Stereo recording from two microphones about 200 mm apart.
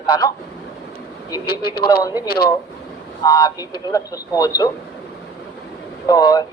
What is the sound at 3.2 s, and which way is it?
A man's voice, 15° left (ahead or behind).